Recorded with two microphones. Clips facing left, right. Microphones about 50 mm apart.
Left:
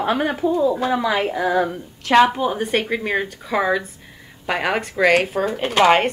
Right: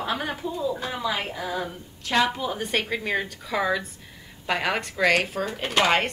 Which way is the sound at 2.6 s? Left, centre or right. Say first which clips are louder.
Left 5 dB; centre.